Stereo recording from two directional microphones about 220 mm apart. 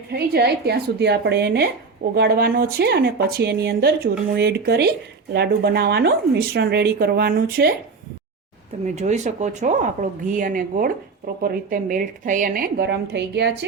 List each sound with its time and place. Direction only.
0.1 s speech: 45° right (ahead or behind)
9.0 s speech: 30° right (ahead or behind); by 13.7 s 50° right (ahead or behind)